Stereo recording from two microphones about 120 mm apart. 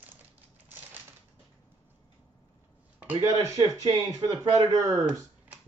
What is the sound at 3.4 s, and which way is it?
Speech, 25° right (ahead or behind).